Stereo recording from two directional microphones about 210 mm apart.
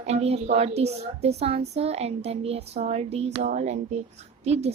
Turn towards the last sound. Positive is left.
turn(degrees=-30)  # may be behind; listen again after turning